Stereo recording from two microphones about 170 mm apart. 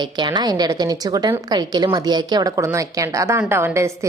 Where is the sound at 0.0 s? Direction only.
25° right (ahead or behind).